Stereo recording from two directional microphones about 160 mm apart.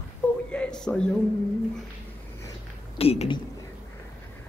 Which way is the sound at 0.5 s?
5° left (ahead or behind).